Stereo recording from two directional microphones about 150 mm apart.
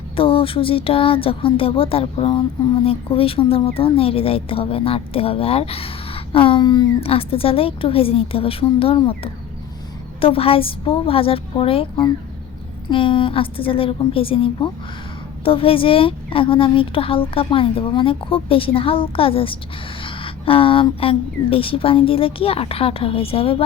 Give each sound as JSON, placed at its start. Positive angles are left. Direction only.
{"t": 0.2, "sound": "a woman's voice", "side_deg": 35}
{"t": 10.2, "sound": "a woman's voice", "side_deg": 40}